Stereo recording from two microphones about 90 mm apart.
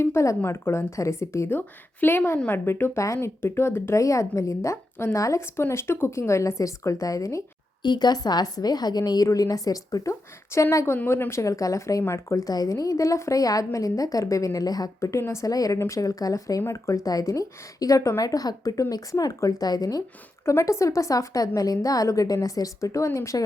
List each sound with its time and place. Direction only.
0.0 s a woman's voice: 30° left (ahead or behind)
7.8 s a woman's voice: 50° left (ahead or behind)
20.4 s a woman's voice: 30° left (ahead or behind)